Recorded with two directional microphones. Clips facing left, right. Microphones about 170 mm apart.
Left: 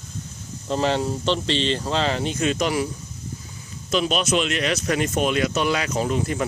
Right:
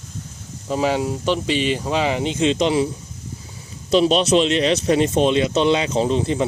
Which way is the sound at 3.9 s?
30° right (ahead or behind).